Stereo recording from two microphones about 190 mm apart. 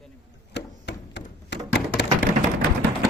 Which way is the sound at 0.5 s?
65° left (ahead or behind).